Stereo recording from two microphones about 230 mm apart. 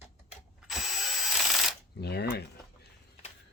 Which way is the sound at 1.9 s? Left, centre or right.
Left.